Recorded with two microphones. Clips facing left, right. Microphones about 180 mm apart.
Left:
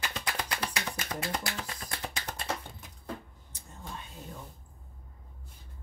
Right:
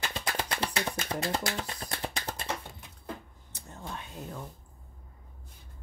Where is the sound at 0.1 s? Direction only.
30° right (ahead or behind).